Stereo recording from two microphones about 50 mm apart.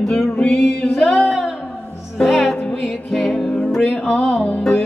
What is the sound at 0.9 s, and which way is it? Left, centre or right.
Music, centre.